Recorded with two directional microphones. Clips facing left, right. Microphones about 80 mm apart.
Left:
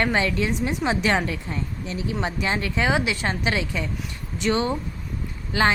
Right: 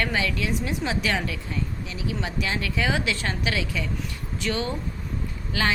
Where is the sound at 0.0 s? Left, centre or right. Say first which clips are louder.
Left 4 dB; left.